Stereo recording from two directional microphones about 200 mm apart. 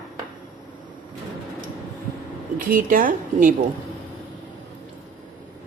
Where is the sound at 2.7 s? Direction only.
45° right (ahead or behind).